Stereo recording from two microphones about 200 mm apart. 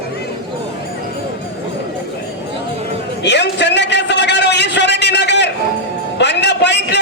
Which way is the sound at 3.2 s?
60° left (ahead or behind).